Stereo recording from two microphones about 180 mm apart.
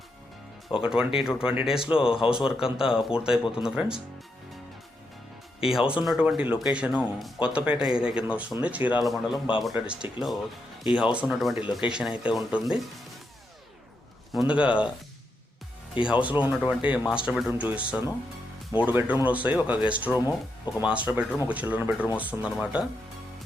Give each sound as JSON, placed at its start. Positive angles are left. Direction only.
{"t": 0.8, "sound": "speech", "side_deg": -5}
{"t": 5.7, "sound": "speech", "side_deg": -5}
{"t": 11.6, "sound": "speech", "side_deg": 25}
{"t": 11.9, "sound": "speech", "side_deg": -5}
{"t": 14.3, "sound": "speech", "side_deg": -5}
{"t": 16.2, "sound": "speech", "side_deg": -10}